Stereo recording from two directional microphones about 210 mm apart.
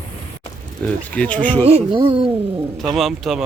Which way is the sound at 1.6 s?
25° right (ahead or behind).